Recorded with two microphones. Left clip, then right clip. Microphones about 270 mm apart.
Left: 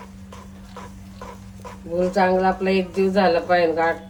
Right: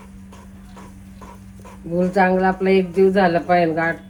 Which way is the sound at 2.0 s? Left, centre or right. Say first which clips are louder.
Right 1 dB; right.